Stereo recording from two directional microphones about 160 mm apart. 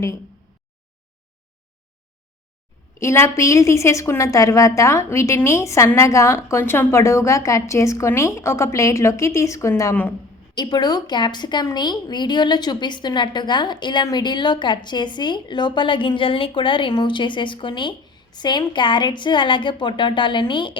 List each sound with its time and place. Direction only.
3.0 s a woman's voice: 15° left (ahead or behind)
10.5 s a woman's voice: 25° left (ahead or behind)